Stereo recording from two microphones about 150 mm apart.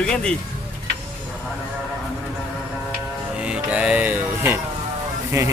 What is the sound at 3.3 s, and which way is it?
Music, 5° right (ahead or behind).